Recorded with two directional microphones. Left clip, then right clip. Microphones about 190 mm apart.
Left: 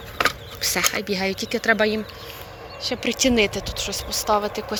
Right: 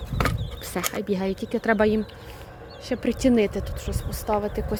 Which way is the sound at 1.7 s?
35° right (ahead or behind).